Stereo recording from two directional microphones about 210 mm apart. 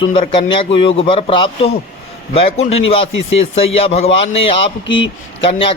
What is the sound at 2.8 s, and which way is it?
Speech, 65° left (ahead or behind).